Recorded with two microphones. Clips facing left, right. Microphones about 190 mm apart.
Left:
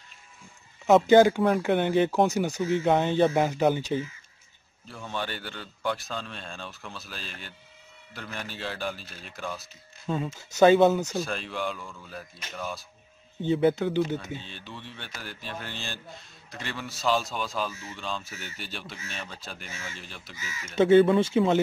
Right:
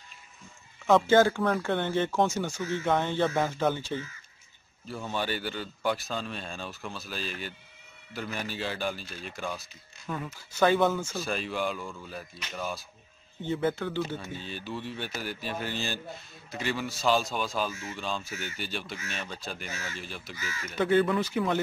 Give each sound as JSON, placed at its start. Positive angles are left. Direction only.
{"t": 0.8, "sound": "speech", "side_deg": 20}
{"t": 4.9, "sound": "speech", "side_deg": -5}
{"t": 10.0, "sound": "speech", "side_deg": 25}
{"t": 11.1, "sound": "speech", "side_deg": -5}
{"t": 13.4, "sound": "speech", "side_deg": 15}
{"t": 14.4, "sound": "speech", "side_deg": -5}
{"t": 19.7, "sound": "speech", "side_deg": 25}
{"t": 20.0, "sound": "speech", "side_deg": 0}
{"t": 20.3, "sound": "speech", "side_deg": 20}